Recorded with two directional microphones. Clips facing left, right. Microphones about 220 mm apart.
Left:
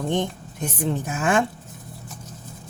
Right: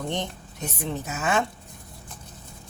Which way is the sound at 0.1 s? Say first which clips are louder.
Left 6 dB; 50° left (ahead or behind).